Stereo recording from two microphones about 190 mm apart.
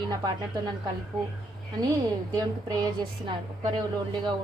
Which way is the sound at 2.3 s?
20° right (ahead or behind).